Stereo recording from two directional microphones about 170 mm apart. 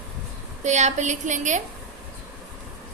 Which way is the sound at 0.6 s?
45° right (ahead or behind).